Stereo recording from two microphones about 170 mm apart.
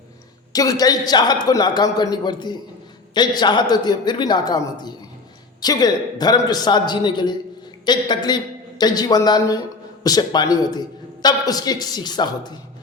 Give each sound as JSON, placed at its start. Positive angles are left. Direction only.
{"t": 0.5, "sound": "a man's voice", "side_deg": 20}